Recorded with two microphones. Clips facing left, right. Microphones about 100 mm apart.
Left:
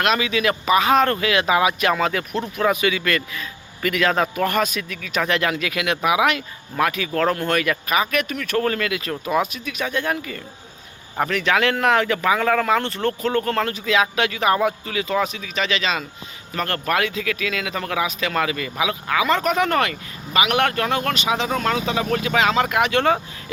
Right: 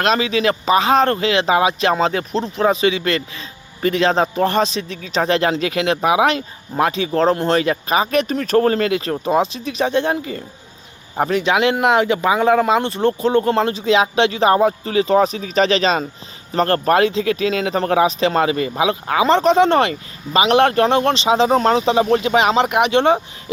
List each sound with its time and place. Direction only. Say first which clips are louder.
0.0 s speech: right 3 dB; 35° right (ahead or behind)